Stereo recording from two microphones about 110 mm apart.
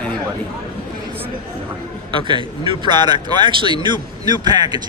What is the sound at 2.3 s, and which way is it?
Speech, 45° right (ahead or behind).